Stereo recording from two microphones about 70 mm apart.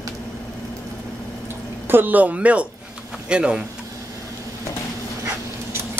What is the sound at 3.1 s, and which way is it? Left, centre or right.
Speech, centre.